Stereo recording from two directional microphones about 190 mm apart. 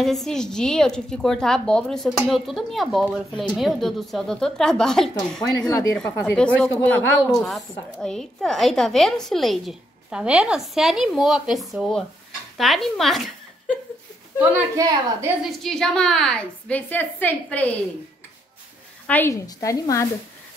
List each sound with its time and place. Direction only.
0.0 s a woman's voice: centre (ahead or behind)
5.4 s speech: 20° left (ahead or behind)
6.0 s a woman's voice: 10° left (ahead or behind)
14.4 s a woman's voice: 20° right (ahead or behind)
15.6 s a woman's voice: 5° left (ahead or behind)
19.0 s speech: 10° left (ahead or behind)